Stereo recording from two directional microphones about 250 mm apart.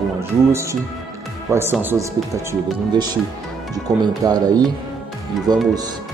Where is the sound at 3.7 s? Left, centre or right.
Centre.